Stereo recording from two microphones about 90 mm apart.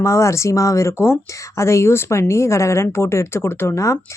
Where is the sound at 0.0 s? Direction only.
35° left (ahead or behind).